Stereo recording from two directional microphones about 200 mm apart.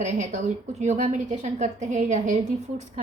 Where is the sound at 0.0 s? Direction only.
35° right (ahead or behind).